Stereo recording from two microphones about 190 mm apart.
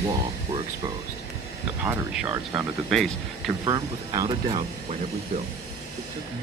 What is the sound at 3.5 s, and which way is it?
Speech, 20° right (ahead or behind).